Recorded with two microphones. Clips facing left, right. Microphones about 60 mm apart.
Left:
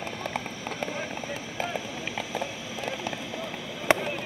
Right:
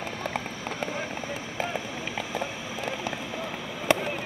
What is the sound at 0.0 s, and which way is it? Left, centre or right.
Rain on surface, right.